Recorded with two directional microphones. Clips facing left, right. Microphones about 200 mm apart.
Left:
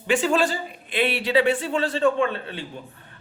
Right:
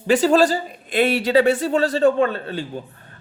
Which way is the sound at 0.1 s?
40° right (ahead or behind).